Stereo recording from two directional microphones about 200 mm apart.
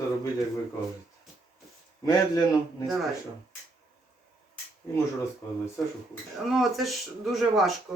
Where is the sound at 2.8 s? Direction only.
Centre (ahead or behind).